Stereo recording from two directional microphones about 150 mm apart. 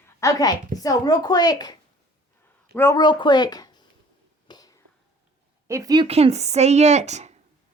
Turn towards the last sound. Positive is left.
turn(degrees=-50)  # may be behind; listen again after turning